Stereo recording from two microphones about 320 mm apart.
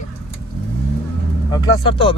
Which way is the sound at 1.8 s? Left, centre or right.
Centre.